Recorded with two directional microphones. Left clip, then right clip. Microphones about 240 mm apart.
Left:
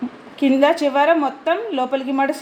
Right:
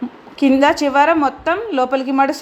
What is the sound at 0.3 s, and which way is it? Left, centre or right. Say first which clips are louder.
A woman's voice: right 2 dB; right.